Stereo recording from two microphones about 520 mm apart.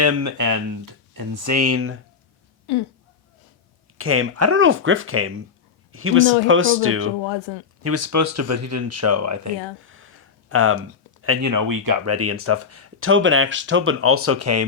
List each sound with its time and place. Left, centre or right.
0.0 s speech: right
2.7 s speech: left
3.9 s speech: right
7.2 s speech: left
7.8 s speech: right
9.8 s a sound: right
11.2 s speech: right
11.5 s speech: right